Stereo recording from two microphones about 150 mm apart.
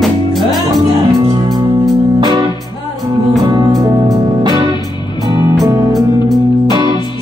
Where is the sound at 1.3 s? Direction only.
25° right (ahead or behind).